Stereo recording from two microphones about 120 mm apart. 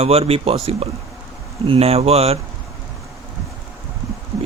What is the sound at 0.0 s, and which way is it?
Speech, 55° right (ahead or behind).